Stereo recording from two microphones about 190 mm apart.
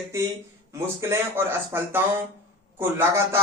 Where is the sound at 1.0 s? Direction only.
10° right (ahead or behind).